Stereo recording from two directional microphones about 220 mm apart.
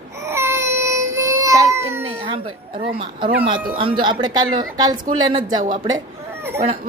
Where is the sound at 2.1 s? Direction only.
20° right (ahead or behind).